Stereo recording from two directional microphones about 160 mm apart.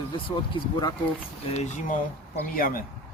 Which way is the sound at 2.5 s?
65° left (ahead or behind).